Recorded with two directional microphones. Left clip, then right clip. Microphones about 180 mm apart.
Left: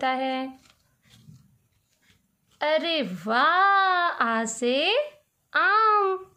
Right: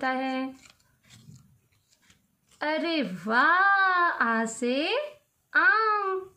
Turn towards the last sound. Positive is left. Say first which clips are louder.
# left 3 dB
turn(degrees=30)  # may be behind; listen again after turning